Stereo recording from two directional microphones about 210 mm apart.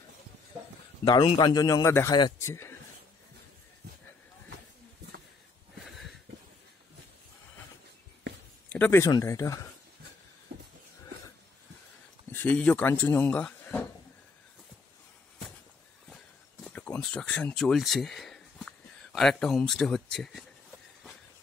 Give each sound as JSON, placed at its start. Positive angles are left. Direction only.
{"t": 1.0, "sound": "a man's voice", "side_deg": 25}
{"t": 5.9, "sound": "a sound", "side_deg": 0}
{"t": 8.3, "sound": "a sound", "side_deg": -55}
{"t": 8.6, "sound": "speech", "side_deg": 10}
{"t": 12.3, "sound": "speech", "side_deg": 10}
{"t": 16.6, "sound": "speech", "side_deg": 5}